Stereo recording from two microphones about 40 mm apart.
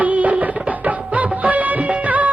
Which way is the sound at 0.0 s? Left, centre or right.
Right.